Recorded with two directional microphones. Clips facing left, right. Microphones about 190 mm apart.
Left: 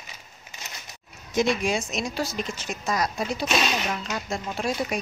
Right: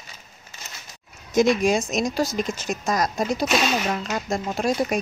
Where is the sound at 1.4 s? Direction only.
45° right (ahead or behind).